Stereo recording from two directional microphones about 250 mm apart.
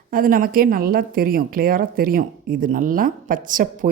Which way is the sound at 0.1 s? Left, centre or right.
Right.